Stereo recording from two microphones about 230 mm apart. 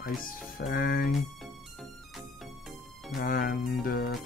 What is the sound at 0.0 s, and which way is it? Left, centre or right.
Speech, left.